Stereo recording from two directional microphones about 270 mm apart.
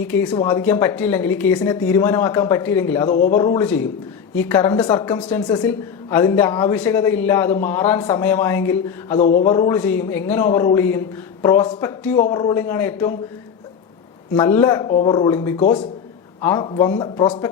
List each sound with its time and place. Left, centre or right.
0.1 s a woman's voice: centre
5.2 s a woman's voice: centre
9.1 s a man's voice: left
9.5 s a woman's voice: centre
14.3 s a woman's voice: centre